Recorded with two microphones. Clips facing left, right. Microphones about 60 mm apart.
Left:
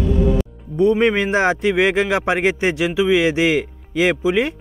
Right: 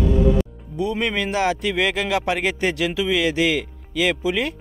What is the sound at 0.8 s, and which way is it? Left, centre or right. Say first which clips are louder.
Speech: left 8 dB; left.